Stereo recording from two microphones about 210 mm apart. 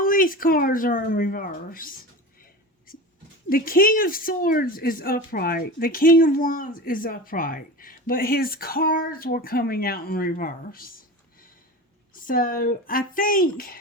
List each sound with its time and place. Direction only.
0.0 s speech: 40° left (ahead or behind)
3.5 s speech: 45° left (ahead or behind)
12.1 s speech: 40° left (ahead or behind)